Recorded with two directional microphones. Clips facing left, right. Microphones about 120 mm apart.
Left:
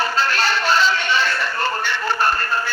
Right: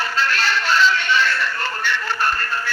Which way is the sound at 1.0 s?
15° left (ahead or behind).